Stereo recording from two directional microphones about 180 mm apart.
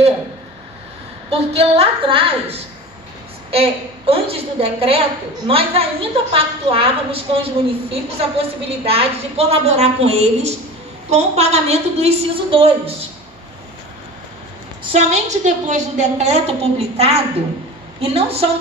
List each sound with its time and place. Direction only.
1.3 s a woman's voice: 35° right (ahead or behind)
3.5 s a woman's voice: 30° right (ahead or behind)
14.8 s a woman's voice: 35° right (ahead or behind)